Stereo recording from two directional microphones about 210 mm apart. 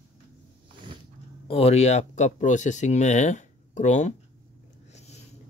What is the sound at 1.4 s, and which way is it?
Speech, 30° left (ahead or behind).